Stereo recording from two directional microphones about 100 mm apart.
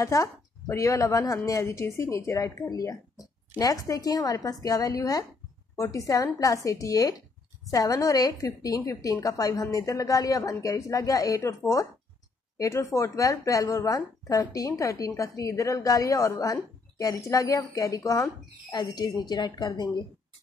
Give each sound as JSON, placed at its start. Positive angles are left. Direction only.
{"t": 0.0, "sound": "speech", "side_deg": 35}